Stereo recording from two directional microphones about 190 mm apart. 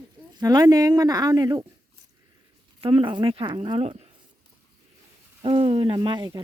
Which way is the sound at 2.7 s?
25° right (ahead or behind).